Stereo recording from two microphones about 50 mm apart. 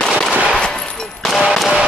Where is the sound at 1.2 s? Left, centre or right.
Centre.